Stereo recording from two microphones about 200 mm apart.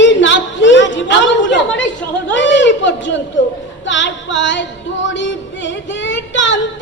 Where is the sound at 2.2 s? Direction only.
65° left (ahead or behind).